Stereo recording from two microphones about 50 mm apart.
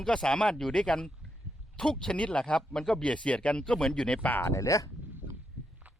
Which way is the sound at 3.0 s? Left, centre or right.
Left.